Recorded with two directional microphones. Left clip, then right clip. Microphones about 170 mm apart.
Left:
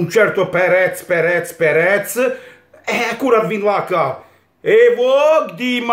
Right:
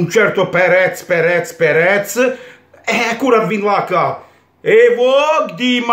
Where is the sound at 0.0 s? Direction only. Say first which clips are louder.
Right 1 dB; centre (ahead or behind).